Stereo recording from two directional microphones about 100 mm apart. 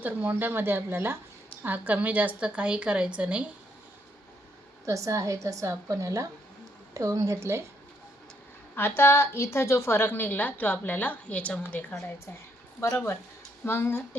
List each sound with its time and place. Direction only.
0.0 s a woman's voice: 15° right (ahead or behind)
4.9 s a woman's voice: 30° right (ahead or behind)
8.7 s a woman's voice: 25° left (ahead or behind)